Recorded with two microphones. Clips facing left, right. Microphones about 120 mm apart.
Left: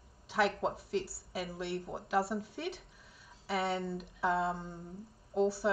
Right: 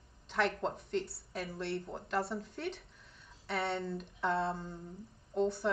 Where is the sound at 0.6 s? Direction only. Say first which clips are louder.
Left 1 dB; 5° left (ahead or behind).